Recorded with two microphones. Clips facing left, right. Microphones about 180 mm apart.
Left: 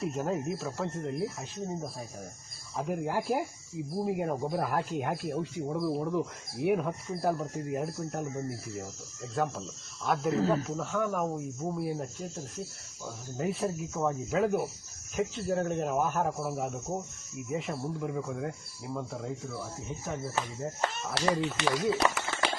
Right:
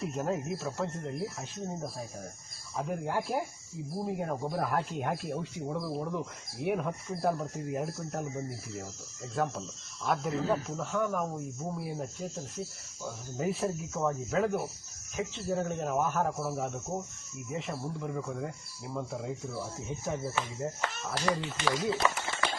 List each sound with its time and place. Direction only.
0.0 s speech: centre (ahead or behind)
21.2 s speech: 80° left